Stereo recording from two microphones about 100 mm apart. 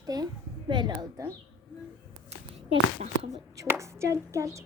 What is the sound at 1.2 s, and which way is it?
Speech, 35° right (ahead or behind).